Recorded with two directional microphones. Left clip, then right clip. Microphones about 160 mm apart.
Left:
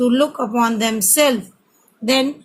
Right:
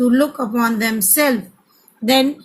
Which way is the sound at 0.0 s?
25° left (ahead or behind).